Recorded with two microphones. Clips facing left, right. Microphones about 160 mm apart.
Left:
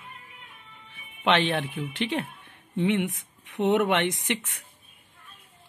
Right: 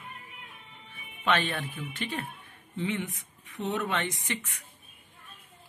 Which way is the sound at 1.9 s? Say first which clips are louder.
Left 7 dB; 70° left (ahead or behind).